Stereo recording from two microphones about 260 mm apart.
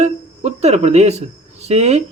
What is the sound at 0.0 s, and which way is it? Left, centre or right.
Speech, right.